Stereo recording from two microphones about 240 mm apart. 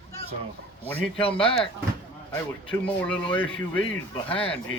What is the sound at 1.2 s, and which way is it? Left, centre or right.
Speech, left.